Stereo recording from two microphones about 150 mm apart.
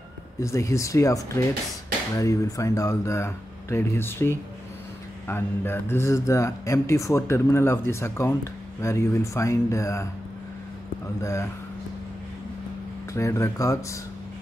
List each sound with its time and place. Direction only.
0.4 s speech: 20° left (ahead or behind)
11.1 s speech: 20° left (ahead or behind)
13.1 s speech: 20° left (ahead or behind)